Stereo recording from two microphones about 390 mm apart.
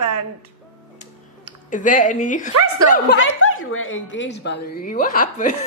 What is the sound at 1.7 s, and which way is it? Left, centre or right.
Speech, centre.